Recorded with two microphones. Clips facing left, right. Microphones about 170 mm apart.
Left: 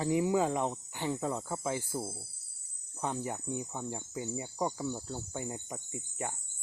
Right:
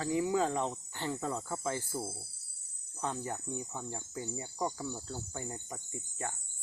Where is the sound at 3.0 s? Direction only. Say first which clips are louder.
Left 2 dB; 15° left (ahead or behind).